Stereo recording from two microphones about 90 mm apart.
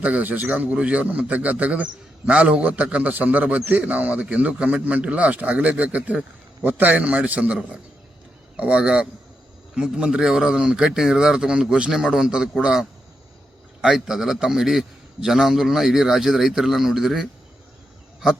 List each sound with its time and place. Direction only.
0.0 s a man's voice: 15° right (ahead or behind)